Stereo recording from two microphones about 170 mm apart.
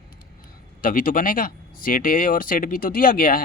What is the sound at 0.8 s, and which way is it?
Speech, 55° left (ahead or behind).